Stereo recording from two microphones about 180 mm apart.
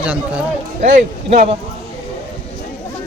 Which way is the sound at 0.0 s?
5° right (ahead or behind).